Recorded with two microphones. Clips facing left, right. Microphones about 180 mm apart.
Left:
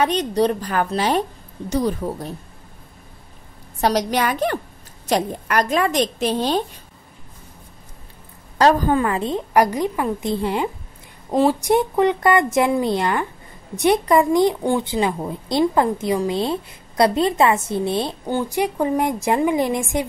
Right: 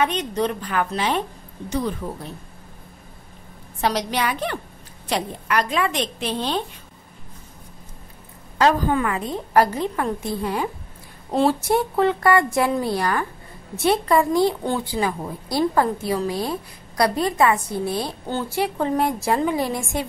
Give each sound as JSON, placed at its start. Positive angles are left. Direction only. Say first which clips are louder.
{"t": 0.0, "sound": "a woman's voice", "louder": "left 4 dB", "side_deg": 35}
{"t": 3.8, "sound": "a woman's voice", "louder": "left 4 dB", "side_deg": 45}
{"t": 8.5, "sound": "a woman's voice", "louder": "left 3 dB", "side_deg": 40}
{"t": 9.5, "sound": "a woman's voice", "louder": "even", "side_deg": 15}
{"t": 10.3, "sound": "a woman's voice", "louder": "left 4 dB", "side_deg": 25}
{"t": 11.3, "sound": "a woman's voice", "louder": "left 2 dB", "side_deg": 15}